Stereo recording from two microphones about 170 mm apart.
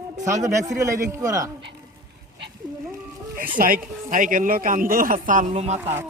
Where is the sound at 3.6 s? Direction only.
55° right (ahead or behind).